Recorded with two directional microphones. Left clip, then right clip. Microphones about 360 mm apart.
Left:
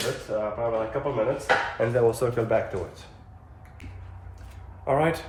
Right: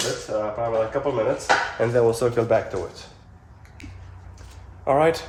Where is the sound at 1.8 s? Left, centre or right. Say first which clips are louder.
Right 3 dB; right.